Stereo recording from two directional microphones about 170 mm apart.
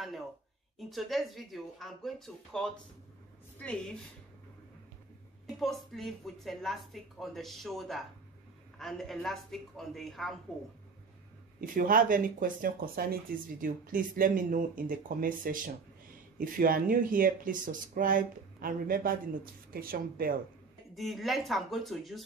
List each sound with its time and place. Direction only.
0.7 s speech: centre (ahead or behind)
5.6 s speech: centre (ahead or behind)
11.6 s speech: 55° right (ahead or behind)
20.9 s speech: centre (ahead or behind)